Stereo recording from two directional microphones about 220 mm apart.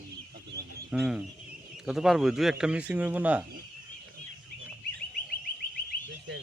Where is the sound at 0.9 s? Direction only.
5° right (ahead or behind).